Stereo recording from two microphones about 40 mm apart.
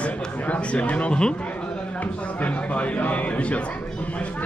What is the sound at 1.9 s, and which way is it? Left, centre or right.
Speech, left.